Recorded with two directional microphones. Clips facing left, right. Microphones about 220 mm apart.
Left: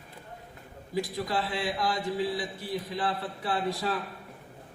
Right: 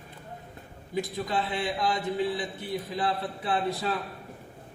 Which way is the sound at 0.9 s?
20° right (ahead or behind).